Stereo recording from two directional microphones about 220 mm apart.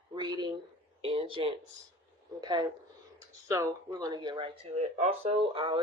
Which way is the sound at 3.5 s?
15° right (ahead or behind).